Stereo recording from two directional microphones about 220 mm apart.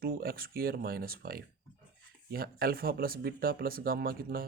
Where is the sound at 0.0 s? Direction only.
40° right (ahead or behind).